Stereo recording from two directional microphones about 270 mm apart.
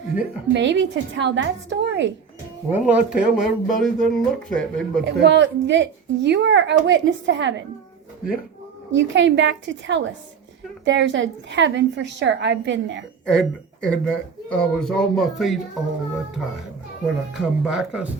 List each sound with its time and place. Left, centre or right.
0.5 s a woman's voice: right
2.6 s speech: centre
5.0 s a woman's voice: right
8.9 s a woman's voice: right
13.2 s speech: centre